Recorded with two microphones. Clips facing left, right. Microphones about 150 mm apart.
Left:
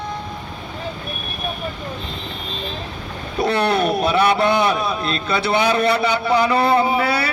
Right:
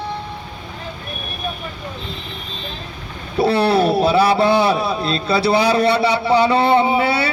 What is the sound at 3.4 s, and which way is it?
A man's voice, 30° right (ahead or behind).